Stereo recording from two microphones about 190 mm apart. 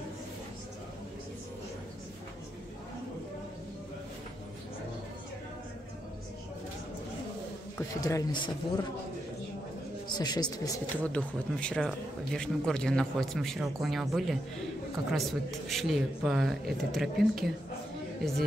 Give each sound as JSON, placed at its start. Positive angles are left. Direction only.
{"t": 7.7, "sound": "a man's voice", "side_deg": 15}
{"t": 10.1, "sound": "speech", "side_deg": 20}
{"t": 11.1, "sound": "speech", "side_deg": 5}